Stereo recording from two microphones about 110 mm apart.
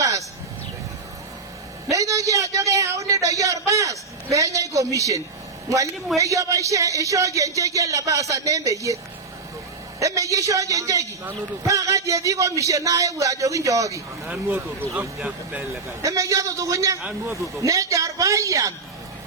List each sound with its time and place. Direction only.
0.0 s a sound: 30° right (ahead or behind)
1.9 s a sound: 30° right (ahead or behind)
5.6 s a man's voice: 30° right (ahead or behind)
10.0 s a man's voice: 30° right (ahead or behind)
14.4 s speech: 15° right (ahead or behind)
16.0 s a man's voice: 30° right (ahead or behind)
17.0 s speech: 15° right (ahead or behind)
17.4 s a man's voice: 30° right (ahead or behind)